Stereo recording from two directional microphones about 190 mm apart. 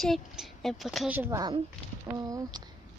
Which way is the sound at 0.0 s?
Centre (ahead or behind).